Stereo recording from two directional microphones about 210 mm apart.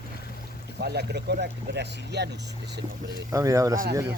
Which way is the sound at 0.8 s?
50° right (ahead or behind).